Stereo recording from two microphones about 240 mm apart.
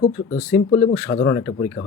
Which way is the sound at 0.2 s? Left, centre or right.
Left.